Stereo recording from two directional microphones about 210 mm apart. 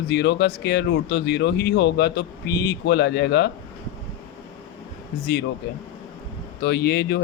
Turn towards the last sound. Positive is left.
turn(degrees=50)  # may be behind; listen again after turning